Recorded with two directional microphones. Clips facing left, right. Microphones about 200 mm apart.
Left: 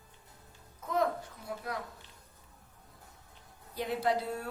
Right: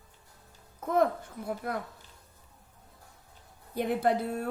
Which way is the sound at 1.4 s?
55° right (ahead or behind).